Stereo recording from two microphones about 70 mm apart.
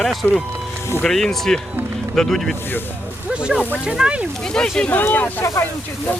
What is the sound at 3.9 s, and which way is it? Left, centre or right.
Speech, centre.